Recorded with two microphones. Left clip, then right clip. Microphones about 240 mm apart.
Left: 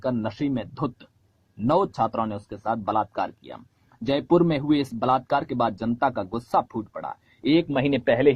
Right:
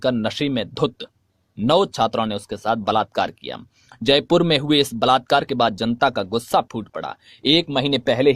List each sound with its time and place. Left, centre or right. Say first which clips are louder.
0.0 s speech: right 6 dB; right